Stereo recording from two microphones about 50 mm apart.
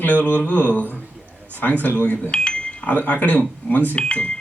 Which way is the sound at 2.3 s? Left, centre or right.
Centre.